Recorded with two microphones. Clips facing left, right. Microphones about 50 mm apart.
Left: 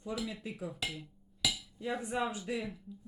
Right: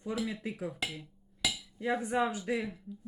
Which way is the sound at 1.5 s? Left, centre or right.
Centre.